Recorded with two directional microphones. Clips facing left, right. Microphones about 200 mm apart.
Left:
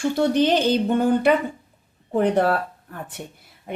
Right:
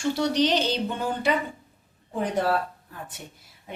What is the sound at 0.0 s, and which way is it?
Speech, 55° left (ahead or behind).